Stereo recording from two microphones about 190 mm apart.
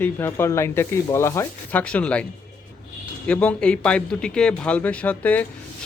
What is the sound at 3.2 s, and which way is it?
A man's voice, 5° left (ahead or behind).